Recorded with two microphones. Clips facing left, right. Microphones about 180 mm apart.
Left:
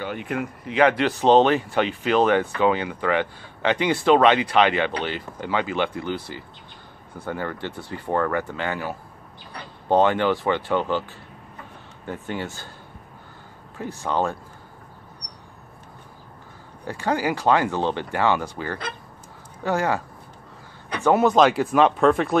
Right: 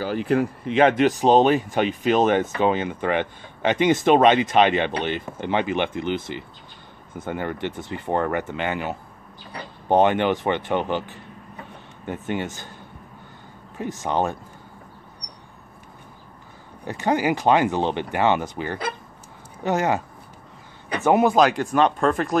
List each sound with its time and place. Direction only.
0.0 s speech: 35° right (ahead or behind); by 12.6 s 20° right (ahead or behind)
14.0 s speech: 20° right (ahead or behind)
16.8 s speech: 20° right (ahead or behind)
21.0 s speech: 15° right (ahead or behind)
21.4 s speech: centre (ahead or behind)